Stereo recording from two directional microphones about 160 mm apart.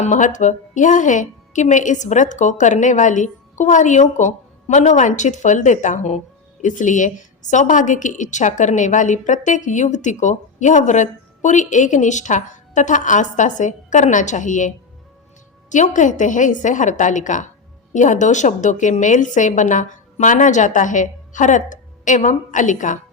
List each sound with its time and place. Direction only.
0.0 s a woman's voice: 50° left (ahead or behind)
15.7 s a woman's voice: 50° left (ahead or behind)